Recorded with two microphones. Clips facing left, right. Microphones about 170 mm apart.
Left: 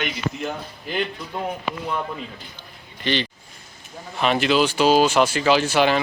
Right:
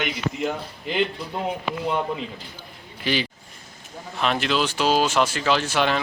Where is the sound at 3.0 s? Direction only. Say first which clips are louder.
Left 1 dB; 5° right (ahead or behind).